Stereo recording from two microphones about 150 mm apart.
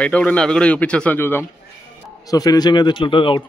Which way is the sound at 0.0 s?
10° left (ahead or behind).